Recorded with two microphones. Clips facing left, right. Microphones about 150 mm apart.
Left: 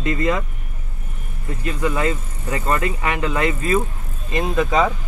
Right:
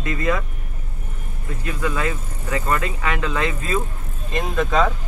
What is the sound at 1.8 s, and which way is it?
Speech, 20° left (ahead or behind).